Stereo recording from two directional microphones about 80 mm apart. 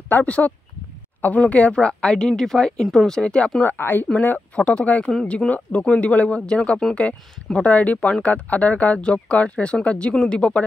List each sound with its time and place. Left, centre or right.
0.1 s a woman's voice: centre
3.6 s a woman's voice: left